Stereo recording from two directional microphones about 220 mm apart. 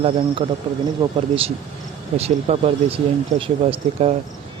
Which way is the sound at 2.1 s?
30° right (ahead or behind).